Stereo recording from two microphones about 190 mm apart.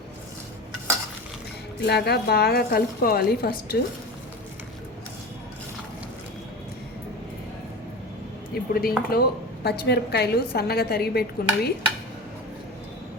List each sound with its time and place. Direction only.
1.8 s a woman's voice: 60° left (ahead or behind)
8.7 s a woman's voice: 50° left (ahead or behind)